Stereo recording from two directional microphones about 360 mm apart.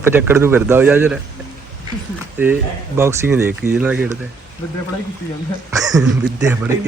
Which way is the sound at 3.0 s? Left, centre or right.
Centre.